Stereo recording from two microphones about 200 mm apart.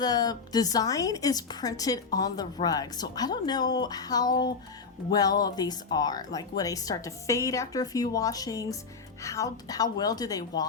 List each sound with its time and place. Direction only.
0.0 s a woman's voice: 20° left (ahead or behind)